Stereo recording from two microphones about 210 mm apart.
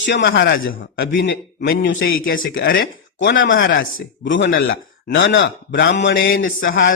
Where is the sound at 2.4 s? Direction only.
45° left (ahead or behind).